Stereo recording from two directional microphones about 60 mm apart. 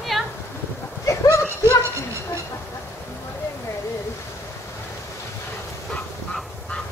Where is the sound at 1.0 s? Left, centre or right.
Left.